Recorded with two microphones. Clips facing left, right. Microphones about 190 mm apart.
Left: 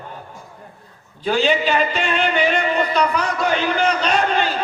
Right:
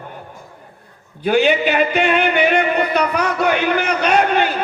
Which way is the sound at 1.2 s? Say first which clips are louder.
Right 3 dB; 60° right (ahead or behind).